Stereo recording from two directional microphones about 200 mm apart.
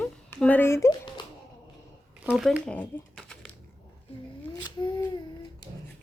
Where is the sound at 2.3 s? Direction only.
5° right (ahead or behind).